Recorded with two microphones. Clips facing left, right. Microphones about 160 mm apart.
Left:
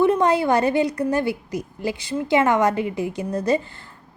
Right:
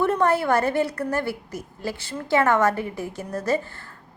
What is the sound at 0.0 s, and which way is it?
A woman's voice, 15° left (ahead or behind).